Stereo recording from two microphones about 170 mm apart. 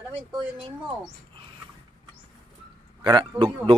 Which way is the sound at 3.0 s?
25° right (ahead or behind).